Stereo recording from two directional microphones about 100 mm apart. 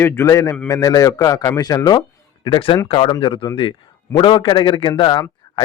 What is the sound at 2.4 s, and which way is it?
Speech, 55° left (ahead or behind).